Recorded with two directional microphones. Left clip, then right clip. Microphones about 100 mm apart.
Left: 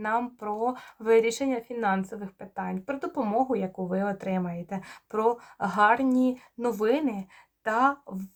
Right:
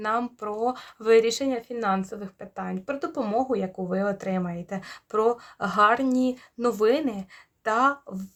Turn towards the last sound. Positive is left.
turn(degrees=-35)  # may be behind; listen again after turning